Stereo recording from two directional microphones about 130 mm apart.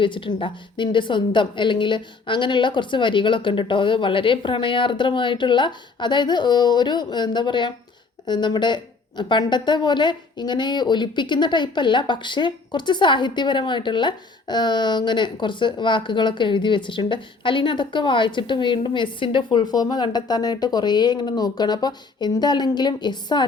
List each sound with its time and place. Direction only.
0.0 s a woman's voice: 40° left (ahead or behind)